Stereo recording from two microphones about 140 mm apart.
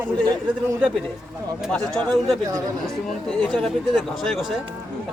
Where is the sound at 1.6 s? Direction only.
5° left (ahead or behind).